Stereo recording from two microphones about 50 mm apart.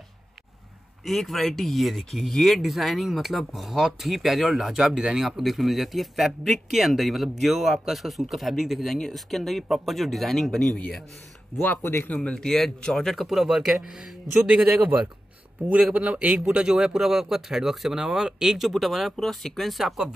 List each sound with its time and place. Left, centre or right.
1.0 s speech: centre
11.6 s speech: left
12.2 s speech: centre
14.5 s speech: right
16.5 s speech: centre
19.1 s speech: centre